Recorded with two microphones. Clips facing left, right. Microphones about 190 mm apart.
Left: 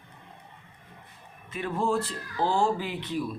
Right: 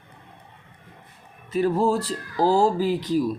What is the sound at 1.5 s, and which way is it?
Speech, 40° right (ahead or behind).